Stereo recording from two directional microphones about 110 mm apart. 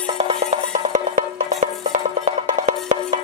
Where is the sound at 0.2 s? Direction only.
75° right (ahead or behind).